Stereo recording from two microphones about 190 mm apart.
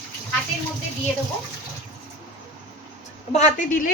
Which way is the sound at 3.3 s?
40° left (ahead or behind).